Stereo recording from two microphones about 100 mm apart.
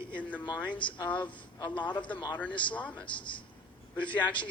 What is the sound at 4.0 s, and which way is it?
Speech, 15° left (ahead or behind).